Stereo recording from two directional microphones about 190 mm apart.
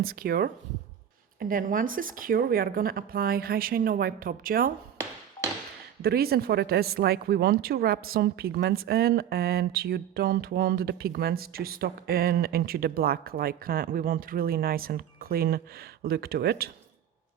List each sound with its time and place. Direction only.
0.0 s speech: 50° right (ahead or behind)
6.0 s speech: 55° right (ahead or behind)